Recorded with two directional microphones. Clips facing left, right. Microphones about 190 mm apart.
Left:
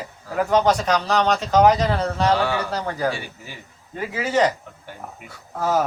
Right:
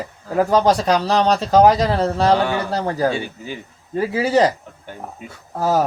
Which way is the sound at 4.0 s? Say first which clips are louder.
Right 4 dB; 35° right (ahead or behind).